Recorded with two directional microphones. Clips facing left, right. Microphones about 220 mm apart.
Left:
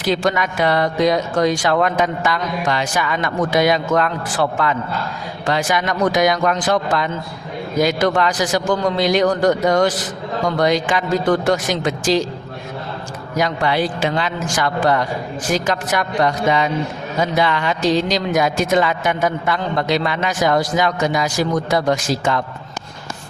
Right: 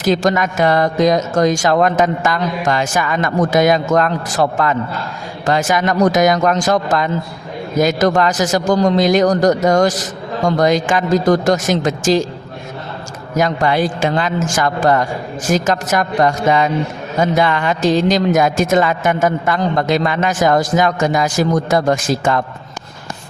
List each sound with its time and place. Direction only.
0.0 s a man's voice: 45° right (ahead or behind)
13.3 s a man's voice: 45° right (ahead or behind)